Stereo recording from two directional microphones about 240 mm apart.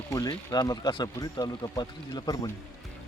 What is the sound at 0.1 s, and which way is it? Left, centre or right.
Speech, centre.